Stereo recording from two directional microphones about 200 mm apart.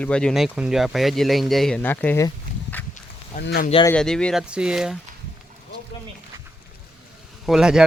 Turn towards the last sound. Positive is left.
turn(degrees=-5)  # may be behind; listen again after turning